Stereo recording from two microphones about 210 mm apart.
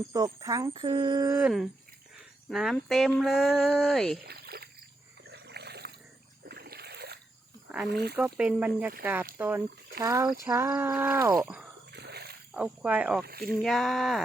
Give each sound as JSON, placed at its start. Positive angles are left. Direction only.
{"t": 0.1, "sound": "speech", "side_deg": -15}
{"t": 1.4, "sound": "speech", "side_deg": -5}
{"t": 4.3, "sound": "a sound", "side_deg": -50}
{"t": 5.3, "sound": "dog", "side_deg": -50}
{"t": 6.4, "sound": "splash", "side_deg": -45}
{"t": 7.9, "sound": "speech", "side_deg": -50}
{"t": 8.4, "sound": "speech", "side_deg": -5}
{"t": 11.9, "sound": "a sound", "side_deg": -55}
{"t": 12.5, "sound": "speech", "side_deg": -5}
{"t": 13.2, "sound": "speech", "side_deg": -45}
{"t": 13.6, "sound": "speech", "side_deg": 0}